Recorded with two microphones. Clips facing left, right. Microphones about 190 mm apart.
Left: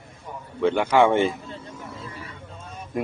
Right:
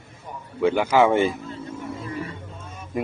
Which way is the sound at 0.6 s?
10° right (ahead or behind).